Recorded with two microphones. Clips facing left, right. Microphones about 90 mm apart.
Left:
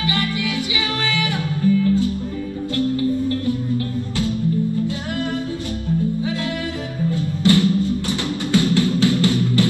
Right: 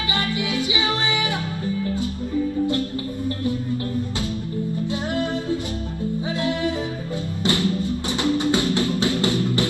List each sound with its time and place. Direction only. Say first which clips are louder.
0.1 s music: right 2 dB; 20° right (ahead or behind)
7.1 s music: left 9 dB; 20° right (ahead or behind)